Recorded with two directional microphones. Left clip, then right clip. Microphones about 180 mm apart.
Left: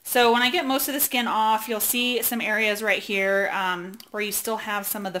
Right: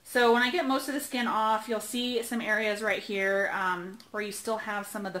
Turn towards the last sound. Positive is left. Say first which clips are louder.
# left 5 dB
turn(degrees=30)  # may be behind; listen again after turning